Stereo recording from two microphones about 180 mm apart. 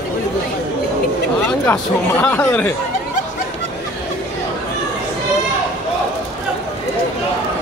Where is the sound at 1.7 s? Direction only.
10° left (ahead or behind).